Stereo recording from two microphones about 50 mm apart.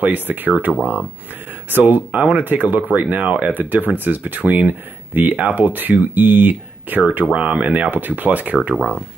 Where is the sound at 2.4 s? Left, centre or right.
Right.